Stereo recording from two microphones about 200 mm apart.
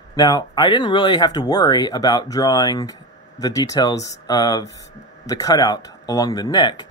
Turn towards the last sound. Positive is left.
turn(degrees=20)  # may be behind; listen again after turning